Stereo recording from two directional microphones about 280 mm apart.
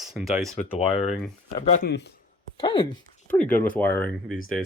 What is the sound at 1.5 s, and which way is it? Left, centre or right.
Speech, left.